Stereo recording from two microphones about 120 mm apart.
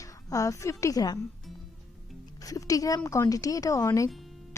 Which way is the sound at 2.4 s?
30° left (ahead or behind).